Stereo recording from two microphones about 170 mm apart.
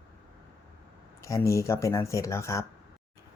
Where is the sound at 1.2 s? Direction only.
20° left (ahead or behind).